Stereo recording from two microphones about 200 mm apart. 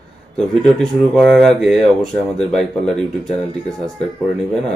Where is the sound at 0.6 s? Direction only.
5° left (ahead or behind).